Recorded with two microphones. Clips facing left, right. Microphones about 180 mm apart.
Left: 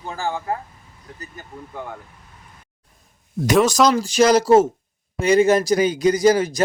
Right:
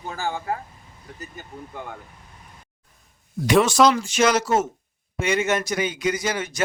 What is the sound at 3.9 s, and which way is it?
A man's voice, 35° left (ahead or behind).